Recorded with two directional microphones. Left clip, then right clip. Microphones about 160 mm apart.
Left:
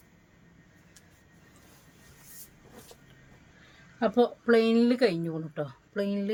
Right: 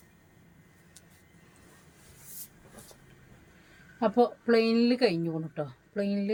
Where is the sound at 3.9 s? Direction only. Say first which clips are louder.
Even; 25° left (ahead or behind).